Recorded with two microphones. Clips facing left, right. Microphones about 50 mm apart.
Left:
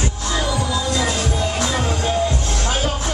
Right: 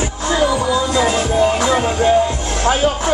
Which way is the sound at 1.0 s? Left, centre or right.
Right.